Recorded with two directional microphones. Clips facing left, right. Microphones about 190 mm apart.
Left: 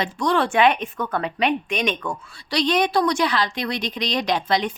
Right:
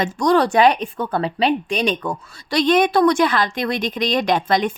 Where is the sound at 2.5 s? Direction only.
50° right (ahead or behind).